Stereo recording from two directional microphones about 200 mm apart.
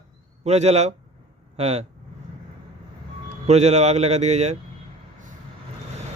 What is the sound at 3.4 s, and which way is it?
A man's voice, 35° right (ahead or behind).